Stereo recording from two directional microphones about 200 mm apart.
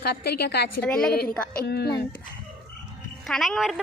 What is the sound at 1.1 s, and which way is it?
Speech, 50° left (ahead or behind).